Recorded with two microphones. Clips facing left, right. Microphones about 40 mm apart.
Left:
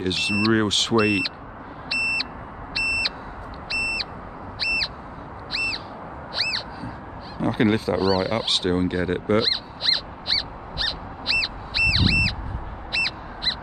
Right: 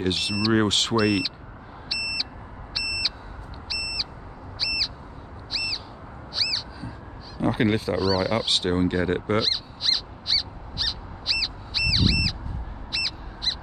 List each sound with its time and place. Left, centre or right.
0.0 s speech: centre
1.9 s buzzer: left
2.7 s a sound: left
4.6 s owl: left
6.3 s owl: left
7.4 s speech: centre
8.0 s speech: left
8.5 s speech: centre
9.4 s owl: left
12.9 s crow: left